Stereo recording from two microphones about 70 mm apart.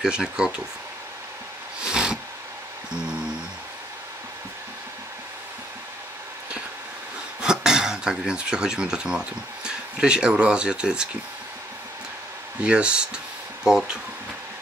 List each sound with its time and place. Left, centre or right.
0.0 s speech: centre
1.8 s a sound: centre
7.4 s speech: centre
12.6 s speech: centre